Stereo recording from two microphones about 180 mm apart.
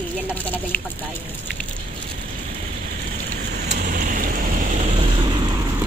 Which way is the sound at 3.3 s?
65° right (ahead or behind).